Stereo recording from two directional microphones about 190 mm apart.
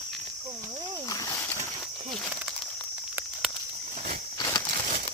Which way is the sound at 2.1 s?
Centre (ahead or behind).